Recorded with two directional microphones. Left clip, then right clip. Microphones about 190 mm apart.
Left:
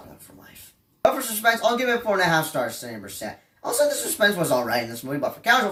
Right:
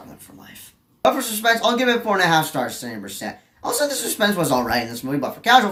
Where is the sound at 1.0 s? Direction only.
10° right (ahead or behind).